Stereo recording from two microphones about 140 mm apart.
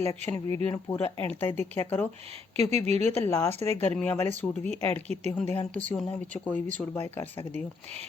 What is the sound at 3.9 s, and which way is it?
Speech, 10° left (ahead or behind).